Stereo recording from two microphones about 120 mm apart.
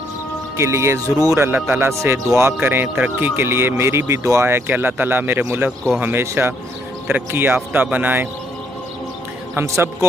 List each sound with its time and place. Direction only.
0.6 s speech: 25° right (ahead or behind)
9.6 s speech: 20° right (ahead or behind)